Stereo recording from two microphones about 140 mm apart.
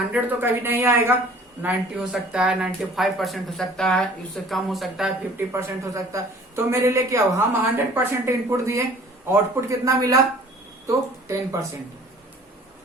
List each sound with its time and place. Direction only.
0.1 s speech: 15° right (ahead or behind)
1.6 s speech: 5° right (ahead or behind)
5.5 s a woman's voice: 20° right (ahead or behind)